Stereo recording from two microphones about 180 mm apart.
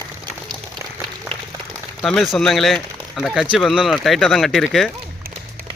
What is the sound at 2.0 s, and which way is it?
Speech, centre (ahead or behind).